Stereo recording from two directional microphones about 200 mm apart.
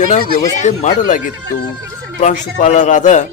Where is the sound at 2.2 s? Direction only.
35° left (ahead or behind).